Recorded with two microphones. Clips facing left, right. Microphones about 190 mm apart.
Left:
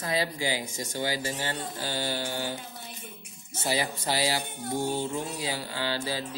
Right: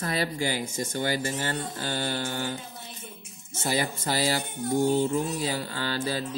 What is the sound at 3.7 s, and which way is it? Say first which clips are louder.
Speech: right 3 dB; 50° right (ahead or behind).